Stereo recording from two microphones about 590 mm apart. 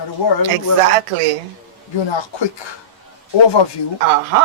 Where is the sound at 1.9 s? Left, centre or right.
Left.